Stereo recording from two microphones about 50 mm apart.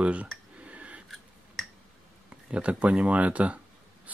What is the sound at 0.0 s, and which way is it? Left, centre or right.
Speech, right.